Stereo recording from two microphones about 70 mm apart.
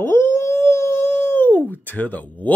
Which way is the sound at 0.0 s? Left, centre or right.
Left.